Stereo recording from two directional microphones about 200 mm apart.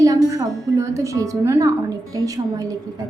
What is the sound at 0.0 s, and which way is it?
A woman's voice, 15° right (ahead or behind).